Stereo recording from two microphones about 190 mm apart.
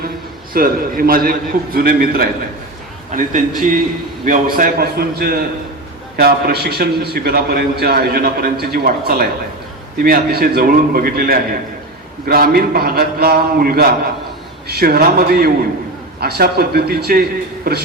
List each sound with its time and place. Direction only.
0.5 s a man's voice: 50° right (ahead or behind)